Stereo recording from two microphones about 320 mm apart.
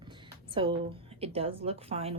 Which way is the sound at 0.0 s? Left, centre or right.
Centre.